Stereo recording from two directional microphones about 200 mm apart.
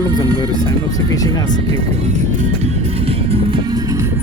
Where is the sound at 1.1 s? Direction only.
20° left (ahead or behind).